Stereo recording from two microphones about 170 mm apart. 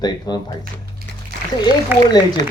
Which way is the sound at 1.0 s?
60° right (ahead or behind).